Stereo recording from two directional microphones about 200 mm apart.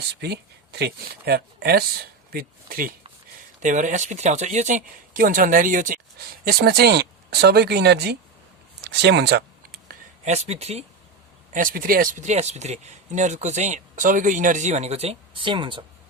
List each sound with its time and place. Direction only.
0.1 s speech: 55° right (ahead or behind)
8.8 s a sound: 55° right (ahead or behind); by 10.8 s 30° right (ahead or behind)
11.5 s speech: 45° right (ahead or behind); by 15.8 s 25° right (ahead or behind)